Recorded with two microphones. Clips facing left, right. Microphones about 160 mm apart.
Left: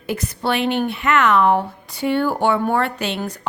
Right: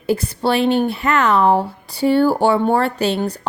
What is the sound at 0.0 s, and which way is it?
Speech, 30° right (ahead or behind).